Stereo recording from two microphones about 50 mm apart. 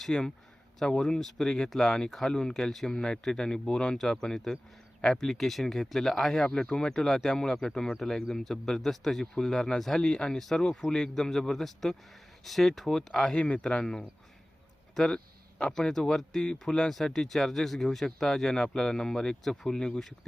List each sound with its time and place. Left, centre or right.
0.0 s speech: centre
13.3 s a man's voice: left